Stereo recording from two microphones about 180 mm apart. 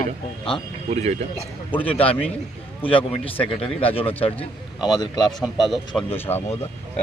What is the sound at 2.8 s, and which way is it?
Speech, 30° left (ahead or behind).